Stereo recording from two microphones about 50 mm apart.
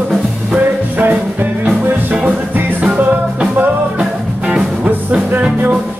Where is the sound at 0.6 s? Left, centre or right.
Right.